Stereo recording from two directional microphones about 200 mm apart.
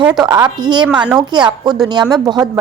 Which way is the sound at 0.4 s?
20° right (ahead or behind).